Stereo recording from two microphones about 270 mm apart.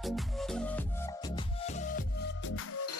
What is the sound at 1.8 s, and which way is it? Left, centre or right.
Music, left.